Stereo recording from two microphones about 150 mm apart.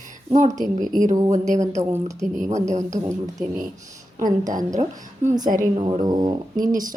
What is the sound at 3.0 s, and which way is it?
Speech, 20° right (ahead or behind).